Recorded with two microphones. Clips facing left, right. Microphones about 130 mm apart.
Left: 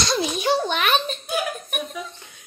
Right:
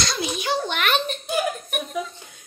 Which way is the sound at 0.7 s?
15° left (ahead or behind).